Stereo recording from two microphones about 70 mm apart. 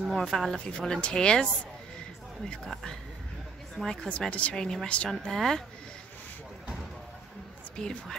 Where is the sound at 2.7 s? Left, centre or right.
Centre.